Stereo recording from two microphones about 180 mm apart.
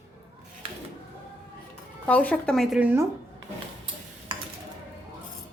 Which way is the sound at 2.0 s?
10° left (ahead or behind).